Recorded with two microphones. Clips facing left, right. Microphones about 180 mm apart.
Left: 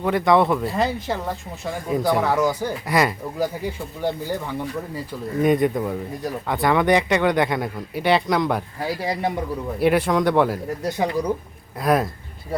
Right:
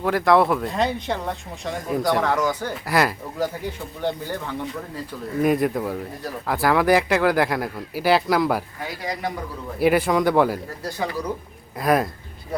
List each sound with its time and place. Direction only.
0.0 s speech: centre (ahead or behind)
2.8 s speech: centre (ahead or behind)
3.3 s speech: 10° left (ahead or behind)
5.4 s speech: 5° right (ahead or behind)
8.8 s speech: 30° left (ahead or behind)
9.8 s speech: centre (ahead or behind)
10.8 s speech: 20° left (ahead or behind)
11.8 s speech: centre (ahead or behind)